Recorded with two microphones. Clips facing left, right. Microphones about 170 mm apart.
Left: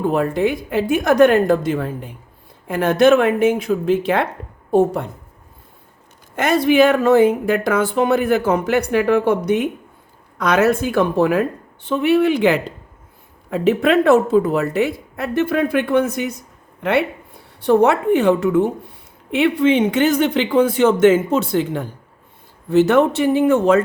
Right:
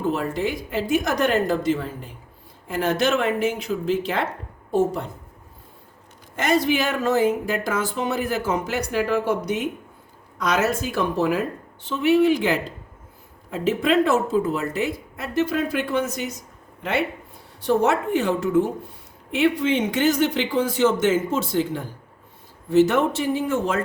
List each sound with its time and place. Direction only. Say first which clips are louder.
0.0 s speech: left 6 dB; 55° left (ahead or behind)
6.3 s speech: left 6 dB; 60° left (ahead or behind)